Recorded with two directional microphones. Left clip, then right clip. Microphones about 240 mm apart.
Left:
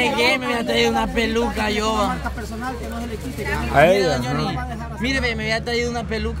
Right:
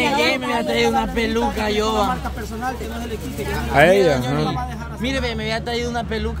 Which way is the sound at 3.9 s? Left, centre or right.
Centre.